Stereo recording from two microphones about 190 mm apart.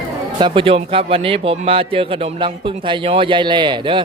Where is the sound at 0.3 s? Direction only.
25° right (ahead or behind).